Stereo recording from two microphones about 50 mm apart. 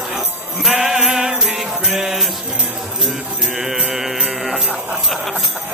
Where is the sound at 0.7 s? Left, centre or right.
Centre.